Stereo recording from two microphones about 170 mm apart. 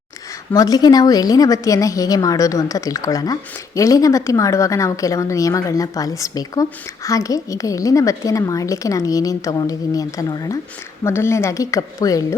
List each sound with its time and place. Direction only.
0.5 s a woman's voice: 20° left (ahead or behind)